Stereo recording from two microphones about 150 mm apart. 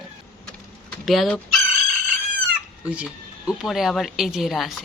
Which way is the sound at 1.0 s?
Centre (ahead or behind).